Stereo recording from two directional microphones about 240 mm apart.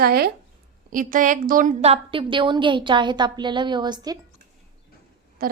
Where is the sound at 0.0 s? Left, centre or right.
Right; by 4.2 s centre.